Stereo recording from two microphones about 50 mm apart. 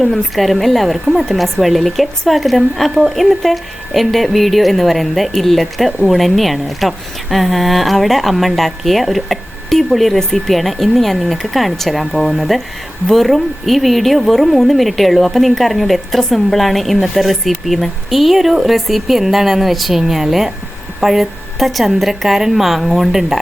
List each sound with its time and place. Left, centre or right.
0.0 s speech: centre